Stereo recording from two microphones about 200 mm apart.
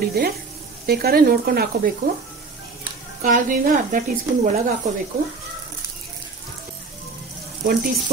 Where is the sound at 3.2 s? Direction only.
40° right (ahead or behind).